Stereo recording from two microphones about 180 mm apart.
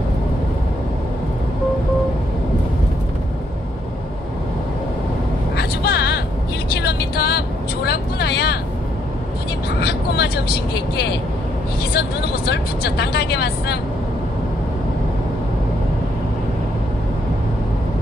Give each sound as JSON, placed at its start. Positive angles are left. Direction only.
{"t": 5.6, "sound": "vehicle", "side_deg": 65}
{"t": 9.8, "sound": "vehicle", "side_deg": 65}